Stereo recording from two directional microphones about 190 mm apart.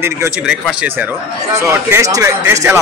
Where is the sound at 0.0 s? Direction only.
15° right (ahead or behind).